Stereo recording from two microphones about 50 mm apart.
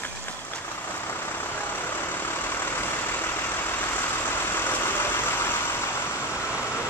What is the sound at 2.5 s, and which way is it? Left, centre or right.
Vehicle, left.